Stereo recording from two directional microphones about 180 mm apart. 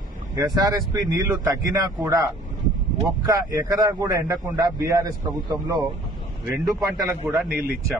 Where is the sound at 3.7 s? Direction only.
15° right (ahead or behind).